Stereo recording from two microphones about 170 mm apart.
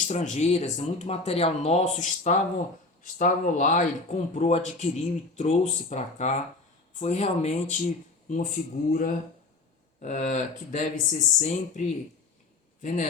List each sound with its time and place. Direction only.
0.1 s a man's voice: 45° left (ahead or behind)